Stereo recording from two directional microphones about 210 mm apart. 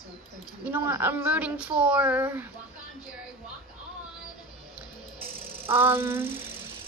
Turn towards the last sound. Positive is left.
turn(degrees=-10)  # may be behind; listen again after turning